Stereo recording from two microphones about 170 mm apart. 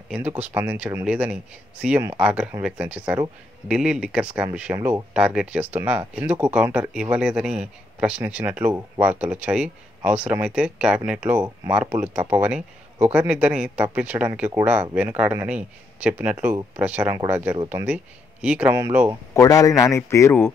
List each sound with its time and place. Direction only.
0.1 s speech: 10° right (ahead or behind)
5.1 s speech: 5° right (ahead or behind)
19.3 s a man's voice: 20° left (ahead or behind)